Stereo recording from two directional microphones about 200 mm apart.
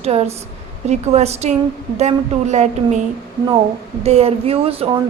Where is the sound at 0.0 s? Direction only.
30° right (ahead or behind).